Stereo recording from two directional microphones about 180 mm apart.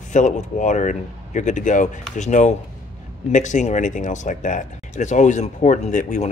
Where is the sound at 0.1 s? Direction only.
45° left (ahead or behind).